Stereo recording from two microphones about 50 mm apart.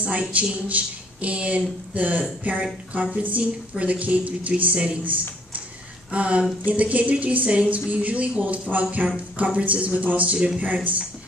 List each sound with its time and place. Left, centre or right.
0.0 s speech: right